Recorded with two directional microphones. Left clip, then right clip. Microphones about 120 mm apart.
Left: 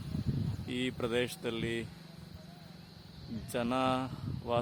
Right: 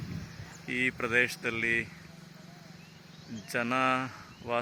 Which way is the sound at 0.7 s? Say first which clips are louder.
Right 6 dB; 25° left (ahead or behind).